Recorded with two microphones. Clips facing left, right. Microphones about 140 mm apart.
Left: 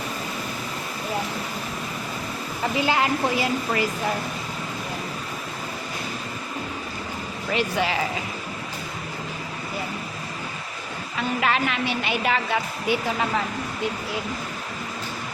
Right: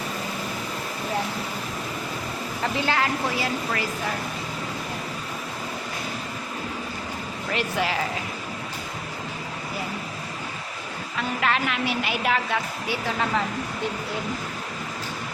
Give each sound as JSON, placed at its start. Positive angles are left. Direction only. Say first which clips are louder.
{"t": 2.8, "sound": "a woman's voice", "louder": "left 3 dB", "side_deg": 15}
{"t": 7.5, "sound": "a woman's voice", "louder": "left 2 dB", "side_deg": 0}
{"t": 11.2, "sound": "a woman's voice", "louder": "left 2 dB", "side_deg": 0}
{"t": 12.9, "sound": "speech", "louder": "left 7 dB", "side_deg": 20}